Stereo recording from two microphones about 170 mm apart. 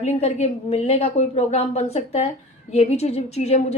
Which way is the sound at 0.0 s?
40° left (ahead or behind).